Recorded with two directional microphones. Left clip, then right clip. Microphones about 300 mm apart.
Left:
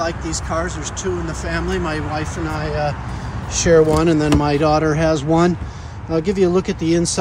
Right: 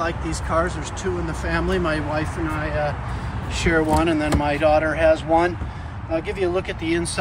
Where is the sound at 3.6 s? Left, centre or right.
Centre.